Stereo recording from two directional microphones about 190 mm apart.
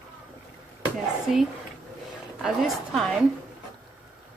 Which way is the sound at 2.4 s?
Centre (ahead or behind).